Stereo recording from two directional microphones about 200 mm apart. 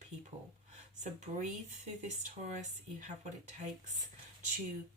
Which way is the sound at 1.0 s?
40° right (ahead or behind).